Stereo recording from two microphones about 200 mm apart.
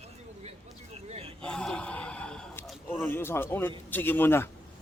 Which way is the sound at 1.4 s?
5° left (ahead or behind).